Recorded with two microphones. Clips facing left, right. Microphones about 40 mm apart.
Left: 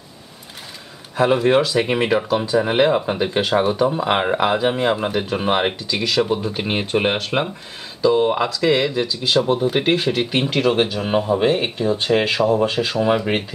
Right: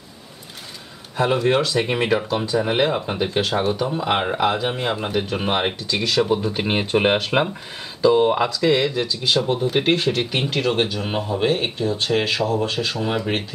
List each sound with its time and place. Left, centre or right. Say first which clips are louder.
1.1 s speech: left 3 dB; centre